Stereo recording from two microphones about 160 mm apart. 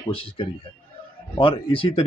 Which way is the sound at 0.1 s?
35° left (ahead or behind).